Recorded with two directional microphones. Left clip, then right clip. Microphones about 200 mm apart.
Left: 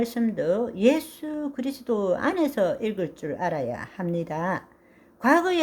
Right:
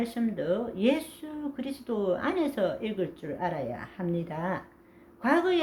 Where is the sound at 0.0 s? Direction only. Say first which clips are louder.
Left 6 dB; 50° left (ahead or behind).